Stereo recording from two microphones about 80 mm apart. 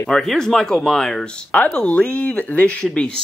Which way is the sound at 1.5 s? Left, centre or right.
Centre.